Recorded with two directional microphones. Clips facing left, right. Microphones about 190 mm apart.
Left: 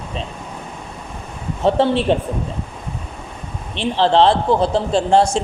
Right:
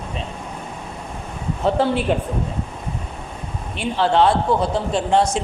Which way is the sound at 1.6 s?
25° left (ahead or behind).